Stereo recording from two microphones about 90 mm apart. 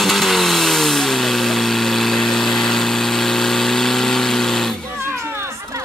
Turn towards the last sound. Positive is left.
turn(degrees=5)  # may be behind; listen again after turning